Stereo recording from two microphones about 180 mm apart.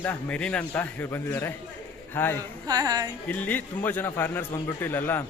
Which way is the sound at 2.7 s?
20° right (ahead or behind).